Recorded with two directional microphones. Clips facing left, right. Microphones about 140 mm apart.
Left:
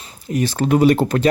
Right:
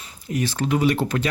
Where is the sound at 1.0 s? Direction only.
35° left (ahead or behind).